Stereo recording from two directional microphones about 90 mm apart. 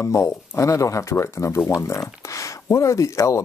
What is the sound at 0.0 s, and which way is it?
Speech, 35° left (ahead or behind).